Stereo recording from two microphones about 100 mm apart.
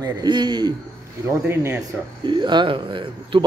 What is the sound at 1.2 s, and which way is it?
Speech, 25° right (ahead or behind).